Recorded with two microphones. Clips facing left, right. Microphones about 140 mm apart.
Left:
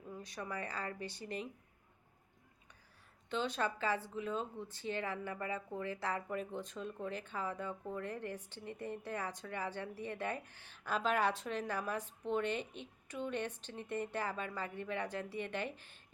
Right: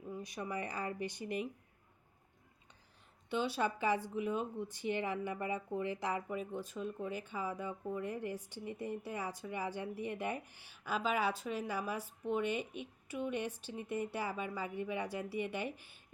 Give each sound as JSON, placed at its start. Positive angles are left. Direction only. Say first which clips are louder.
{"t": 0.2, "sound": "speech", "louder": "right 2 dB", "side_deg": -10}
{"t": 3.2, "sound": "speech", "louder": "right 2 dB", "side_deg": -10}